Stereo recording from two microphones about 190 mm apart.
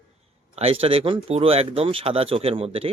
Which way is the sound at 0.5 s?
30° right (ahead or behind).